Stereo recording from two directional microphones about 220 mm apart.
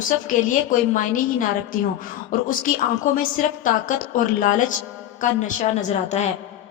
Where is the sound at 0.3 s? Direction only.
35° left (ahead or behind).